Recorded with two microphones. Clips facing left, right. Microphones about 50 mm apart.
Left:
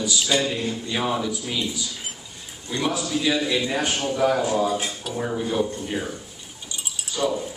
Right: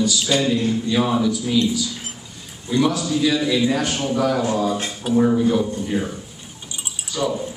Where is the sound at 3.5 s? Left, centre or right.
Centre.